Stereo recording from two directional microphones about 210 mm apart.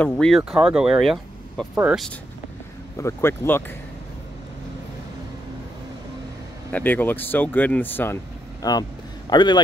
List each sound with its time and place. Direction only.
0.0 s speech: 5° left (ahead or behind)
3.0 s speech: 10° left (ahead or behind)
6.7 s a man's voice: 10° left (ahead or behind)